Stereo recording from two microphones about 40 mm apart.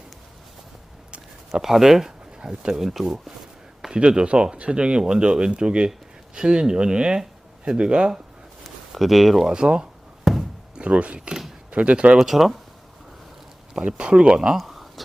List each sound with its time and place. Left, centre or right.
1.5 s speech: centre
3.9 s speech: right
8.6 s speech: centre
9.5 s speech: right
10.3 s a sound: centre
10.8 s speech: right
12.2 s speech: centre
13.7 s speech: right
14.6 s a sound: centre